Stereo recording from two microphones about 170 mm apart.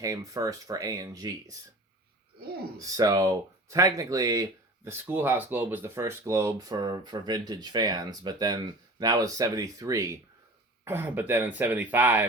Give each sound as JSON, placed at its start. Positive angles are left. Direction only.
{"t": 0.0, "sound": "speech", "side_deg": -20}
{"t": 2.7, "sound": "speech", "side_deg": -20}